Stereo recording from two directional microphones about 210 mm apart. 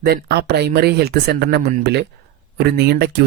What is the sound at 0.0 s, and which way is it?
Speech, 50° right (ahead or behind).